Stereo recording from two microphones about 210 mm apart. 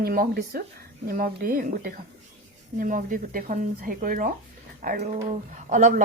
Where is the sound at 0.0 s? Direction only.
45° right (ahead or behind).